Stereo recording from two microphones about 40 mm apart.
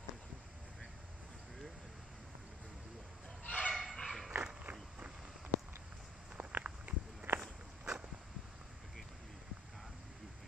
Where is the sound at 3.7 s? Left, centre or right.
Centre.